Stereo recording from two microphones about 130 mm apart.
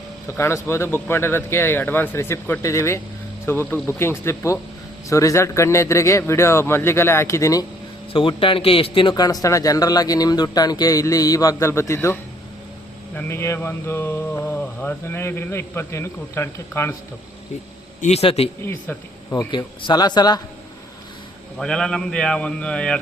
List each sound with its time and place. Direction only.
0.3 s a man's voice: 20° left (ahead or behind)
8.1 s a man's voice: 40° left (ahead or behind); by 12.2 s 20° left (ahead or behind)
13.1 s mantra: 20° left (ahead or behind)
18.0 s a man's voice: 50° left (ahead or behind)
18.6 s mantra: 15° left (ahead or behind)
19.5 s a man's voice: 35° left (ahead or behind)
21.6 s mantra: 5° left (ahead or behind)